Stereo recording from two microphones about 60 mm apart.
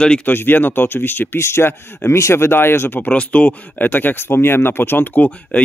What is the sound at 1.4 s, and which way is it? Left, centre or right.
Speech, left.